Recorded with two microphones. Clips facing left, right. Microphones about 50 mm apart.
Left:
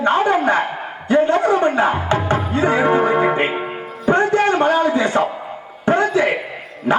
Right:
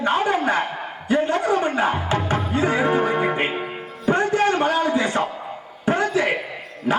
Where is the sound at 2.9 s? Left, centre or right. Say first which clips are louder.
Left 5 dB; centre.